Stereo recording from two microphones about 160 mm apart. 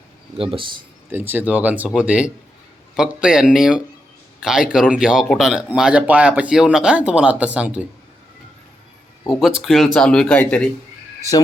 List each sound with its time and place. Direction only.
0.3 s speech: 35° right (ahead or behind)
1.1 s a man's voice: 15° right (ahead or behind)
9.6 s speech: centre (ahead or behind)